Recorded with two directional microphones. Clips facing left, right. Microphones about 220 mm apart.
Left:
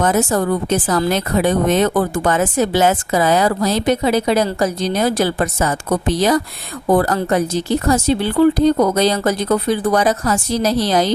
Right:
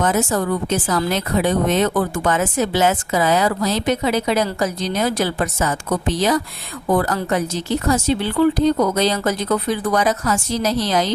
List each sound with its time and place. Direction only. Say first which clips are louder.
0.0 s speech: left 3 dB; 40° left (ahead or behind)